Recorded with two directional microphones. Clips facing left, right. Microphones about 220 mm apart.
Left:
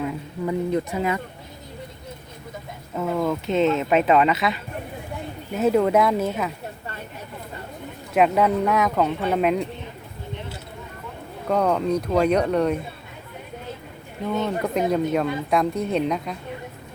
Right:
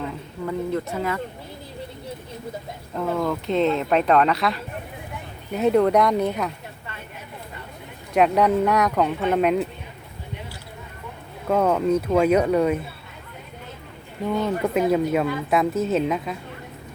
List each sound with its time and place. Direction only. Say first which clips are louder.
0.0 s a woman's voice: left 3 dB; 15° left (ahead or behind)
2.9 s speech: left 1 dB; 5° left (ahead or behind)
8.1 s speech: right 1 dB; centre (ahead or behind)
11.4 s speech: right 1 dB; 5° right (ahead or behind)
14.4 s speech: right 2 dB; 5° right (ahead or behind)